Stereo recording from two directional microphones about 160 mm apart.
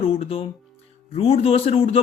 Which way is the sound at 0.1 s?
35° left (ahead or behind).